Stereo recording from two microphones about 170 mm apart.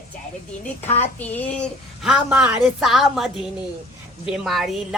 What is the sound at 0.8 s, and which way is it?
Speech, 40° left (ahead or behind).